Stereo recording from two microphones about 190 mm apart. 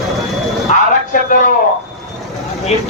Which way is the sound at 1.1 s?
45° left (ahead or behind).